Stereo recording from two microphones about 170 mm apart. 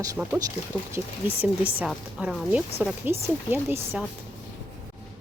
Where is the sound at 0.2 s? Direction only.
10° right (ahead or behind).